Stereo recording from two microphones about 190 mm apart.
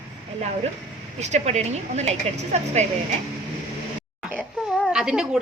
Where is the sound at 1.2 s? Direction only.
35° right (ahead or behind).